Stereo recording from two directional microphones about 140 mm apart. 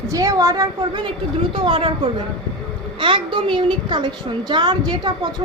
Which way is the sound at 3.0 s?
35° right (ahead or behind).